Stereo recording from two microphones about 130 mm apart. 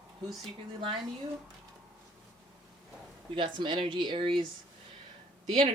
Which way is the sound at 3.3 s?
40° right (ahead or behind).